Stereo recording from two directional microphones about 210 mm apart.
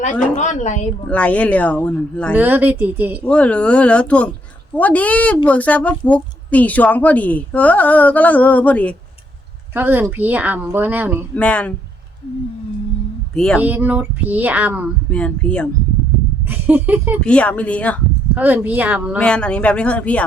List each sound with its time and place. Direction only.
0.0 s a woman's voice: 35° left (ahead or behind)
1.1 s a woman's voice: 5° left (ahead or behind)
2.3 s a woman's voice: 10° right (ahead or behind)
3.2 s a woman's voice: 5° left (ahead or behind)
9.7 s a woman's voice: 10° right (ahead or behind)
11.3 s a woman's voice: 5° left (ahead or behind)
13.3 s speech: 5° left (ahead or behind)
13.6 s a woman's voice: 10° right (ahead or behind)
15.1 s speech: 5° left (ahead or behind)
16.5 s a woman's voice: 10° right (ahead or behind)
17.2 s speech: 5° left (ahead or behind)
18.3 s a woman's voice: 10° right (ahead or behind)
19.2 s speech: 5° left (ahead or behind)